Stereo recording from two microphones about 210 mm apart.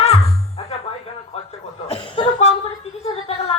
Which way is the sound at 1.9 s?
25° left (ahead or behind).